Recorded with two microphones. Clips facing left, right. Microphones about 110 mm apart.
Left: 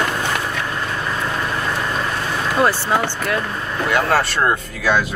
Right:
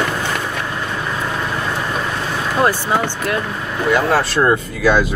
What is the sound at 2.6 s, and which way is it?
Speech, 15° right (ahead or behind).